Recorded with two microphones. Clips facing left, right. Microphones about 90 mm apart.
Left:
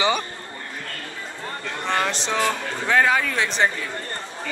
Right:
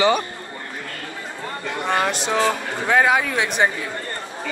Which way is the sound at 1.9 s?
10° right (ahead or behind).